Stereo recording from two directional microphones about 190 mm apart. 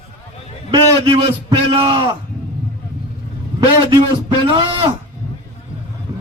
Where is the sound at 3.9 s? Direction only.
25° right (ahead or behind).